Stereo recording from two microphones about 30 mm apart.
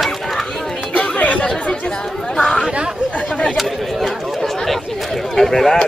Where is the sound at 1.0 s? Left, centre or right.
Left.